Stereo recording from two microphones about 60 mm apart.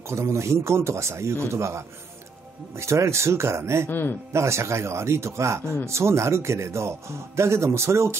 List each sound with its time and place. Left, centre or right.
0.0 s speech: right
3.9 s speech: left
4.3 s speech: right